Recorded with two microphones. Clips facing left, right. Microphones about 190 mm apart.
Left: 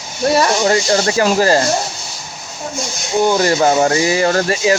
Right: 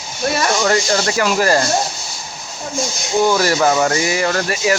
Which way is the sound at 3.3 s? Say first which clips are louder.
Left 2 dB; 25° left (ahead or behind).